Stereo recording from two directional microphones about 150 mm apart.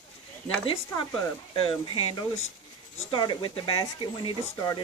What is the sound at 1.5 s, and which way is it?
Speech, 35° left (ahead or behind).